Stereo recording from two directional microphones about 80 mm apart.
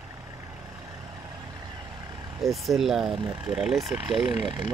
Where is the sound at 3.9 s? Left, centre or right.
Right.